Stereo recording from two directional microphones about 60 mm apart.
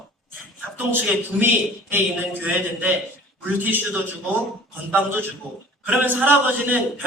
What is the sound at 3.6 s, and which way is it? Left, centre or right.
Speech, right.